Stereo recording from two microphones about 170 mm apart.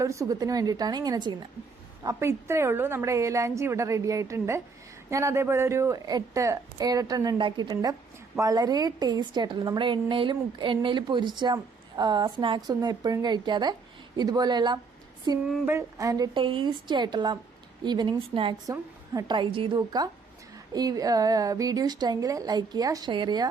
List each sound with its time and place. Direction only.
0.0 s a woman's voice: 20° right (ahead or behind)
15.4 s a sound: centre (ahead or behind)
15.7 s a woman's voice: 20° right (ahead or behind)